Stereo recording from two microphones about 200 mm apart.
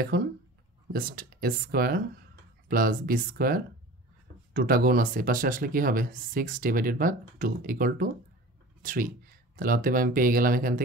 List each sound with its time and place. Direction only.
0.1 s speech: 50° right (ahead or behind)